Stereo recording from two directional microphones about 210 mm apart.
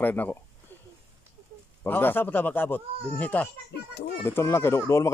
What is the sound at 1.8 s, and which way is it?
Speech, 10° left (ahead or behind).